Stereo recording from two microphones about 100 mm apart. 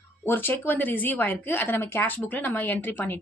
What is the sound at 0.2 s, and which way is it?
A woman's voice, 20° left (ahead or behind).